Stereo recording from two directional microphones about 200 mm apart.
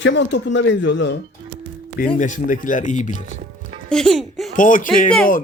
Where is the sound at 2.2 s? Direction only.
40° left (ahead or behind).